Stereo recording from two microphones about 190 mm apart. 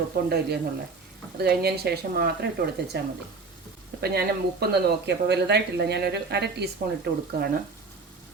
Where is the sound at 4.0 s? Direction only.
55° right (ahead or behind).